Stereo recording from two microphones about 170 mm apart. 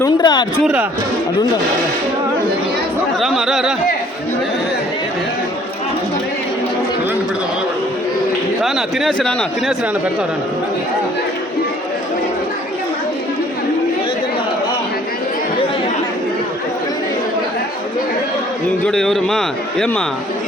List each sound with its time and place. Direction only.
0.0 s speech: 25° left (ahead or behind)
3.2 s speech: centre (ahead or behind)
8.6 s a man's voice: centre (ahead or behind)
18.9 s a man's voice: centre (ahead or behind)